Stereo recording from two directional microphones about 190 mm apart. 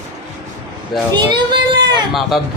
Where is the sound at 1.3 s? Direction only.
25° right (ahead or behind).